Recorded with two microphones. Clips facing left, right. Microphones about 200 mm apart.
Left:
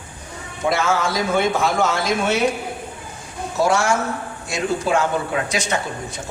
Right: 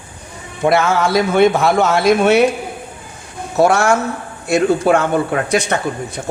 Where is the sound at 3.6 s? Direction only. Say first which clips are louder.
Right 5 dB; 60° right (ahead or behind).